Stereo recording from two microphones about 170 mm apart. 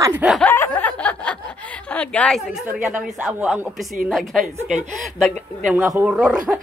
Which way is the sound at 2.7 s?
10° right (ahead or behind).